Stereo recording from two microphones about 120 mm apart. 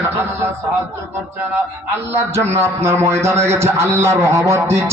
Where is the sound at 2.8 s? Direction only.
20° right (ahead or behind).